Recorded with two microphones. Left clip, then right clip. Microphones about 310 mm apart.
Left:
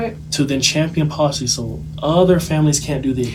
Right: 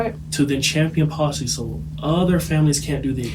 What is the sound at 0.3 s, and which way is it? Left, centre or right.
A man's voice, centre.